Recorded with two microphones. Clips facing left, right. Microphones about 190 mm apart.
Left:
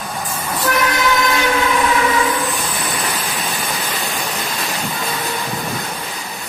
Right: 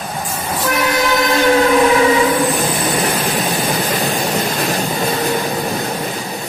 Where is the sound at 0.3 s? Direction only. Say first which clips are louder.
Even; 15° right (ahead or behind).